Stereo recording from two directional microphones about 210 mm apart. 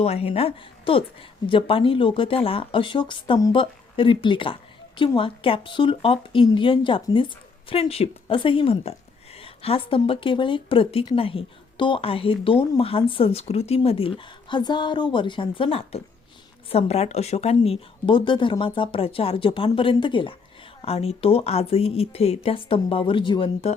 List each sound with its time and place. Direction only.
0.0 s speech: 30° left (ahead or behind)